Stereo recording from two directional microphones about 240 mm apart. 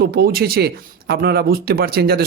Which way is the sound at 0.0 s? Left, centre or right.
Right.